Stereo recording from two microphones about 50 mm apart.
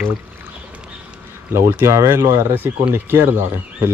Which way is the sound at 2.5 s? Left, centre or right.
Right.